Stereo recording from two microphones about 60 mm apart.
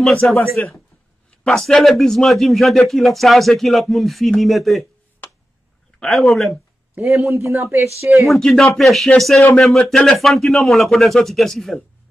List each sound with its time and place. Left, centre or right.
0.0 s speech: centre
0.6 s speech: left
1.4 s speech: centre
5.9 s speech: centre
7.2 s a man's voice: right
8.3 s speech: centre